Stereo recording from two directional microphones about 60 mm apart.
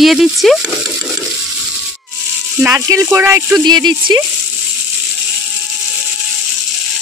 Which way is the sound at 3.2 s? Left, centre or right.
Right.